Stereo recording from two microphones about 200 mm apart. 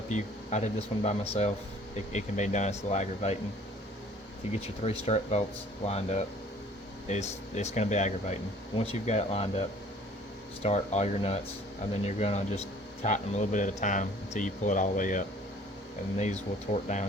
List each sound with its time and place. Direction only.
0.1 s speech: 35° left (ahead or behind)
4.5 s speech: 30° left (ahead or behind)